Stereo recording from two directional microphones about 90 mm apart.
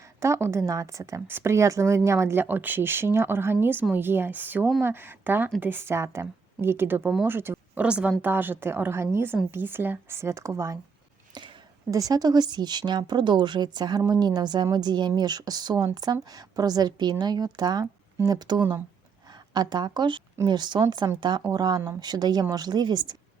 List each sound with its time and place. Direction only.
0.0 s a woman's voice: 30° right (ahead or behind)
7.8 s speech: 15° right (ahead or behind); by 10.8 s 35° right (ahead or behind)
11.3 s a sound: 55° right (ahead or behind)
11.9 s a woman's voice: 40° right (ahead or behind)